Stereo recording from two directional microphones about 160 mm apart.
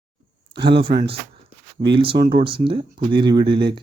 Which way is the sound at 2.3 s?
35° right (ahead or behind).